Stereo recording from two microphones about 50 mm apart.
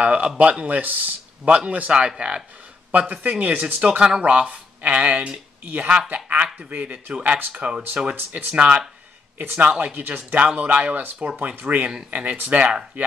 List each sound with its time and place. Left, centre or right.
0.0 s speech: right
1.4 s speech: right
2.9 s speech: right
3.3 s speech: right
4.0 s speech: right
8.2 s speech: right
8.5 s speech: right